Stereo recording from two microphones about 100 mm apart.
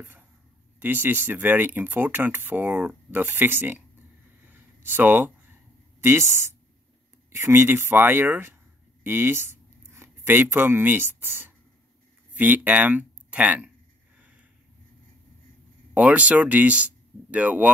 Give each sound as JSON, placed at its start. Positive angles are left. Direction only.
{"t": 0.7, "sound": "speech", "side_deg": -20}
{"t": 4.5, "sound": "a sound", "side_deg": -20}
{"t": 6.0, "sound": "speech", "side_deg": -25}
{"t": 15.9, "sound": "speech", "side_deg": -15}